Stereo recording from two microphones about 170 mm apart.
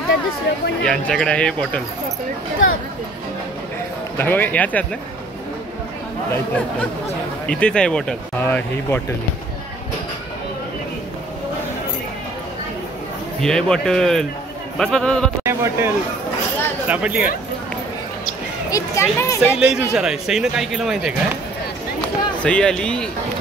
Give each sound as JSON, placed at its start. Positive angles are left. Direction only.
{"t": 0.8, "sound": "speech", "side_deg": 5}
{"t": 4.2, "sound": "speech", "side_deg": 10}
{"t": 6.3, "sound": "speech", "side_deg": 10}
{"t": 13.4, "sound": "speech", "side_deg": 5}
{"t": 15.4, "sound": "speech", "side_deg": -15}
{"t": 18.7, "sound": "speech", "side_deg": 20}
{"t": 19.4, "sound": "speech", "side_deg": -5}
{"t": 22.4, "sound": "speech", "side_deg": 5}